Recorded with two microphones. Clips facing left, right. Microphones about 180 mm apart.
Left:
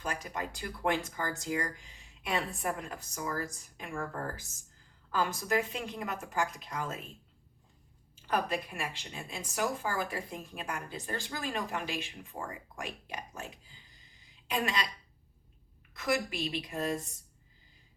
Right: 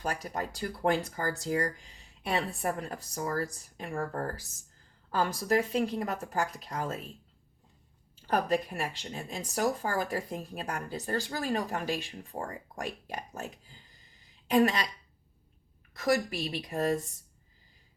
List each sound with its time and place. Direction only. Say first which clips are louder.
0.0 s speech: right 3 dB; 40° right (ahead or behind)
8.3 s speech: right 4 dB; 40° right (ahead or behind)
14.5 s speech: right 8 dB; 40° right (ahead or behind)
16.0 s speech: right 4 dB; 40° right (ahead or behind)